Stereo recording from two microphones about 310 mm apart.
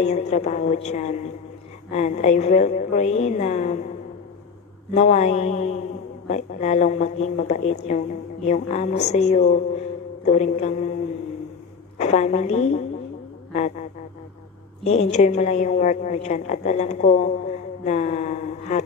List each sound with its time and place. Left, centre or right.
0.0 s a woman's voice: left
4.9 s a woman's voice: left
12.0 s a woman's voice: left
13.5 s a sound: left
14.9 s a woman's voice: left